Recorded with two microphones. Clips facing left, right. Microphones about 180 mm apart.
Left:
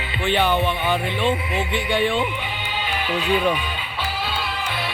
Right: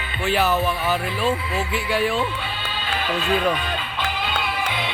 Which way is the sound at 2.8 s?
15° left (ahead or behind).